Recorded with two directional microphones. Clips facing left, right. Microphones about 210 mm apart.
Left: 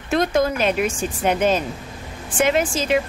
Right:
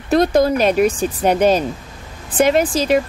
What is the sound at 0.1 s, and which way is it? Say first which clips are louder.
Speech: right 5 dB; 35° right (ahead or behind).